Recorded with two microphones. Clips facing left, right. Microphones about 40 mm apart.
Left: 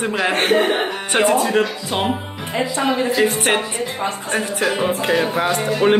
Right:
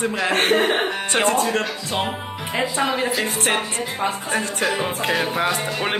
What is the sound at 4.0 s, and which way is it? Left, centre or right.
A woman's voice, centre.